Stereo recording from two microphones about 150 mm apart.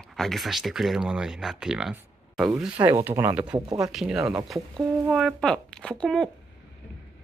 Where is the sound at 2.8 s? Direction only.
15° right (ahead or behind); by 6.2 s 5° left (ahead or behind).